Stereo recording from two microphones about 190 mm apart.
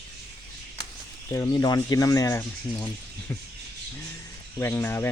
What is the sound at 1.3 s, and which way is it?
Speech, 20° left (ahead or behind).